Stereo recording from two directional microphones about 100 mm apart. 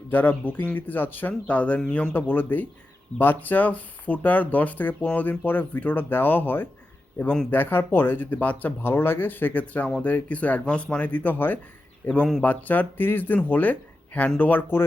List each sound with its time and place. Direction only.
0.1 s speech: 20° left (ahead or behind)